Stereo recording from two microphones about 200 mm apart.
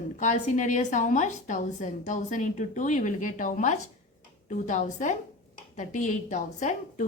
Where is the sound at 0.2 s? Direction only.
40° left (ahead or behind).